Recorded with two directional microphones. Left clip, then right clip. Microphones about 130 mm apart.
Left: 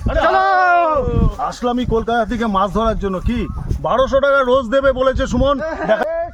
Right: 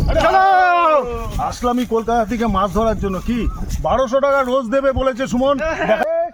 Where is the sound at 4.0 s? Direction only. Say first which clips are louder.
Left 3 dB; centre (ahead or behind).